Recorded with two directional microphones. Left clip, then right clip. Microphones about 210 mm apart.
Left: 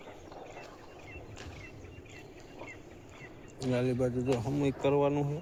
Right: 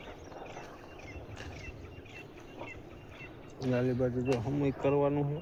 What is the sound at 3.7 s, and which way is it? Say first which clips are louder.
Speech: even; 10° left (ahead or behind).